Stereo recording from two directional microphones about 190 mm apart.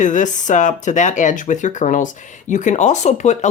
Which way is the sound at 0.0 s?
40° left (ahead or behind).